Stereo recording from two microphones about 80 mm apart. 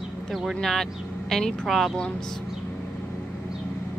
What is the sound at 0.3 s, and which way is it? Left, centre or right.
A woman's voice, centre.